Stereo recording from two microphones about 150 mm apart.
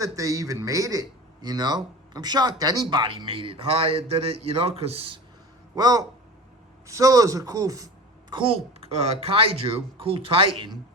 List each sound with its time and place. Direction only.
0.0 s speech: 20° right (ahead or behind); by 5.2 s 40° right (ahead or behind)
5.7 s speech: 25° right (ahead or behind)
8.3 s speech: 35° right (ahead or behind)